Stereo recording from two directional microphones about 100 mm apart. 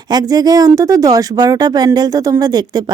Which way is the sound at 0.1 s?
40° right (ahead or behind).